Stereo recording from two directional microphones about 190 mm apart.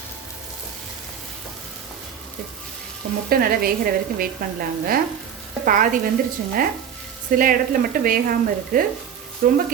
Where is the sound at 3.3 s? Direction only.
50° right (ahead or behind).